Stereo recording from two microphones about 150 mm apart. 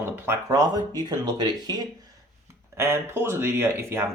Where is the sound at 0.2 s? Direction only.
20° right (ahead or behind).